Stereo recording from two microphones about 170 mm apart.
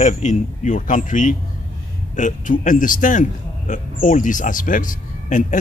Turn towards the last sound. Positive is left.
turn(degrees=50)  # may be behind; listen again after turning